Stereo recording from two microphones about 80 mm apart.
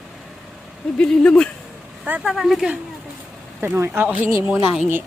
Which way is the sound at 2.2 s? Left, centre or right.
Centre.